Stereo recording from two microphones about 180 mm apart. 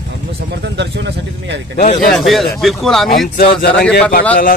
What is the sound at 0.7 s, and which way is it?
Speech, 75° right (ahead or behind).